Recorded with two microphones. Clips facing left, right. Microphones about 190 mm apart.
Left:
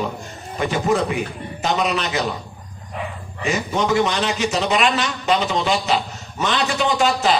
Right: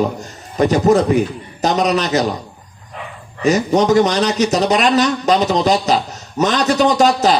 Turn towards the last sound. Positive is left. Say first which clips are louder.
# right 6 dB
turn(degrees=-40)  # may be behind; listen again after turning